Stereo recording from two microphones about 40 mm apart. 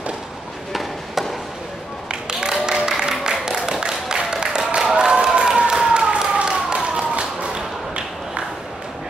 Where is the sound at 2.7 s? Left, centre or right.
Centre.